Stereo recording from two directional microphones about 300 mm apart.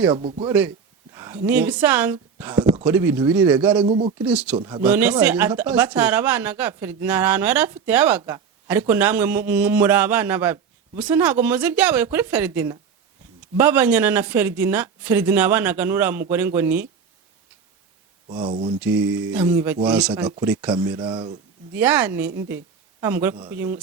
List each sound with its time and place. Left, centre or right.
0.1 s speech: centre
0.4 s speech: centre
1.1 s a sound: centre
1.5 s speech: centre
3.8 s speech: centre
4.2 s speech: centre
4.5 s speech: centre
4.8 s speech: centre
18.3 s speech: centre
18.8 s speech: centre